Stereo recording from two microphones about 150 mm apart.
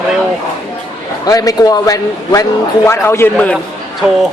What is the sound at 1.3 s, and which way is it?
A man's voice, 25° left (ahead or behind).